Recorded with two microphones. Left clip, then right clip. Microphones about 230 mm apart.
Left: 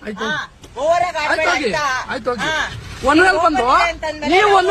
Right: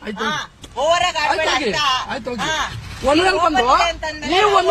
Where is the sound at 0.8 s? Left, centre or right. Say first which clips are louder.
Even; centre.